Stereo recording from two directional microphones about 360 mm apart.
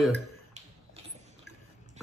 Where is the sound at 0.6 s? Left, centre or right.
Centre.